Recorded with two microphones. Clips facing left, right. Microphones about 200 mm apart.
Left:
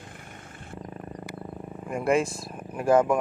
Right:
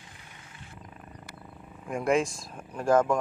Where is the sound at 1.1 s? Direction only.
50° left (ahead or behind).